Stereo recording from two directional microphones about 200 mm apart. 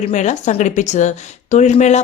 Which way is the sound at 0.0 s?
35° left (ahead or behind).